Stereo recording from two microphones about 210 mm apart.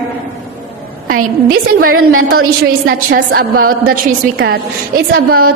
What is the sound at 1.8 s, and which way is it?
Speech, 90° right.